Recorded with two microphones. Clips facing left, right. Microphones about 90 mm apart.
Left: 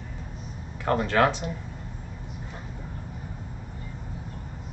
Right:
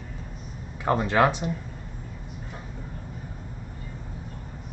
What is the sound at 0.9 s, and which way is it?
Speech, 15° right (ahead or behind).